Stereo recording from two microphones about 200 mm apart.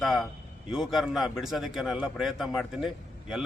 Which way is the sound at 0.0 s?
Centre (ahead or behind).